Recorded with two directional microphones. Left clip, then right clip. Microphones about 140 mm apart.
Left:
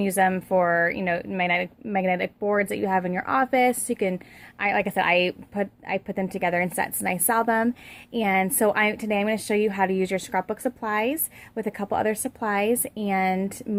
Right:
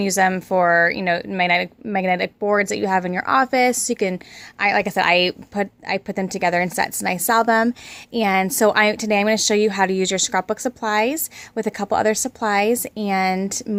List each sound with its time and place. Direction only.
0.0 s speech: 30° right (ahead or behind)